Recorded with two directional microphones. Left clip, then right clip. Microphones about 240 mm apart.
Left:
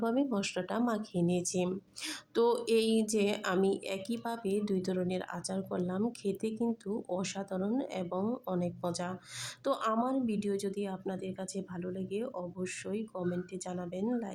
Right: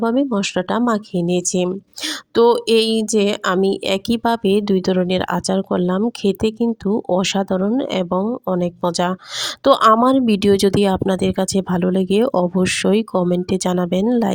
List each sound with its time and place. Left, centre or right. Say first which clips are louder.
0.0 s speech: right 14 dB; right